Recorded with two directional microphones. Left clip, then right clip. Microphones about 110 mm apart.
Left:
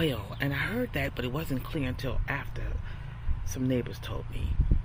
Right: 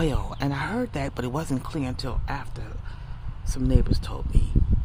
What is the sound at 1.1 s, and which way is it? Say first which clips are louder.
Speech: right 4 dB; 60° right (ahead or behind).